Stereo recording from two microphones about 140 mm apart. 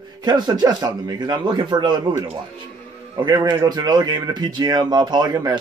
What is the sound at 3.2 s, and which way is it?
Speech, 30° right (ahead or behind).